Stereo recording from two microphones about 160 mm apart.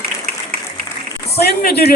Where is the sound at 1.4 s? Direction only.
80° left.